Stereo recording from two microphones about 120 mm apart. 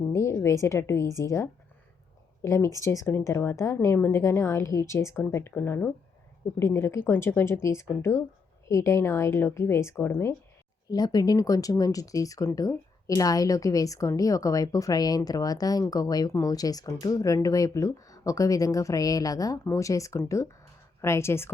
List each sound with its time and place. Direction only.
0.1 s a woman's voice: 25° left (ahead or behind)
10.8 s speech: 35° left (ahead or behind)